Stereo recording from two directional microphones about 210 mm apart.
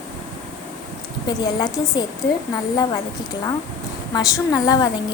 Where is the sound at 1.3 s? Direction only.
20° left (ahead or behind).